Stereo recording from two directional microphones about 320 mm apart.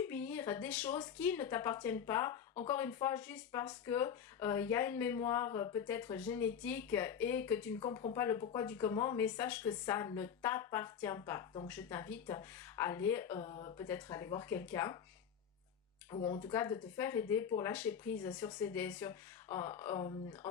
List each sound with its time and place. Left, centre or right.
0.0 s a woman's voice: centre
16.1 s a woman's voice: centre